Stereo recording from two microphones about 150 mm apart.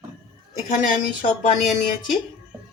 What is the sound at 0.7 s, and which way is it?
Speech, 55° left (ahead or behind).